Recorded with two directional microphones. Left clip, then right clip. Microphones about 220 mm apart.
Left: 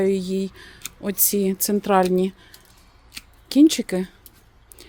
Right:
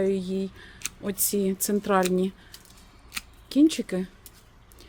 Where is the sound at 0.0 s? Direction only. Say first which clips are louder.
Left 5 dB; 30° left (ahead or behind).